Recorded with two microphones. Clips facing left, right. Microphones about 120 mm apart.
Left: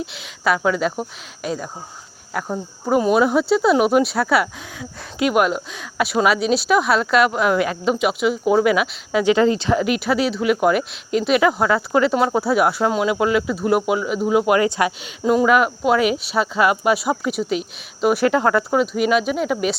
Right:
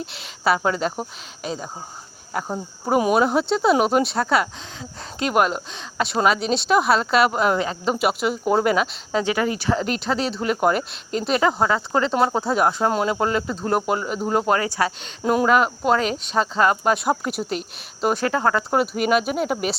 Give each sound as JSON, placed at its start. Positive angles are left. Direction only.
{"t": 0.0, "sound": "speech", "side_deg": 0}
{"t": 2.3, "sound": "speech", "side_deg": -5}
{"t": 9.2, "sound": "speech", "side_deg": 25}
{"t": 10.0, "sound": "speech", "side_deg": 5}
{"t": 11.3, "sound": "speech", "side_deg": -30}
{"t": 11.9, "sound": "speech", "side_deg": 5}
{"t": 15.2, "sound": "speech", "side_deg": 0}
{"t": 18.2, "sound": "speech", "side_deg": 15}
{"t": 18.7, "sound": "speech", "side_deg": 0}